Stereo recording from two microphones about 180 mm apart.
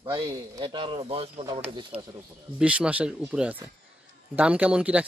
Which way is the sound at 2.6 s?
5° right (ahead or behind).